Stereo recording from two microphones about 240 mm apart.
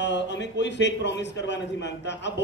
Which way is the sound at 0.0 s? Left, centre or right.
Left.